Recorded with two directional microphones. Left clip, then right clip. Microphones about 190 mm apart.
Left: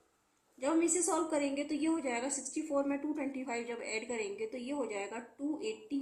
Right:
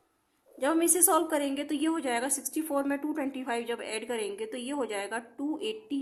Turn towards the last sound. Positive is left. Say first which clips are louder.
# right 4 dB
turn(degrees=-45)  # may be behind; listen again after turning